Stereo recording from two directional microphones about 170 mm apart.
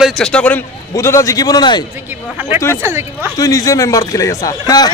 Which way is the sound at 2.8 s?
15° right (ahead or behind).